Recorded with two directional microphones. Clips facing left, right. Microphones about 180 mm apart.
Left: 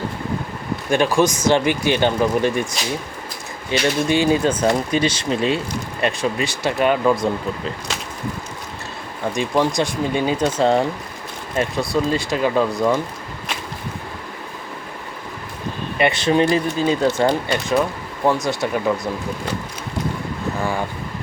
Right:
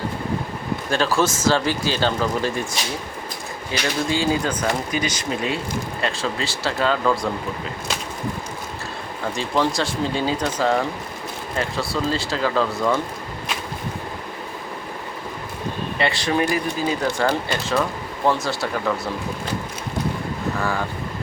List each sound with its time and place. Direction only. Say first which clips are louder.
0.9 s speech: left 4 dB; 15° left (ahead or behind)
3.7 s speech: left 5 dB; 25° left (ahead or behind)
9.3 s speech: left 3 dB; 15° left (ahead or behind)
16.0 s speech: left 5 dB; 20° left (ahead or behind)